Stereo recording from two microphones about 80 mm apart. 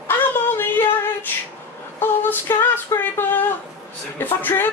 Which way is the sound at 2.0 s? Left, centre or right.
Left.